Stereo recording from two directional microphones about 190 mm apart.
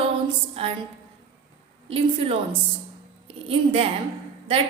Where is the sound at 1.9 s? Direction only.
30° right (ahead or behind).